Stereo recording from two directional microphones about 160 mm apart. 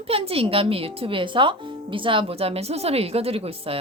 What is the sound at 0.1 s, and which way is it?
Speech, 35° right (ahead or behind).